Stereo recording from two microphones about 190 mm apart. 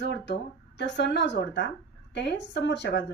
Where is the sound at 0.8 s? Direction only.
70° left (ahead or behind).